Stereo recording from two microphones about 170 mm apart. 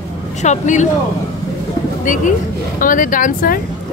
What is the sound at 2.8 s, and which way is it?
Speech, 50° left (ahead or behind).